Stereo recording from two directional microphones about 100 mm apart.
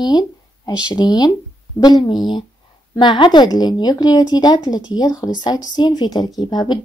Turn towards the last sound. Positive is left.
turn(degrees=45)  # may be behind; listen again after turning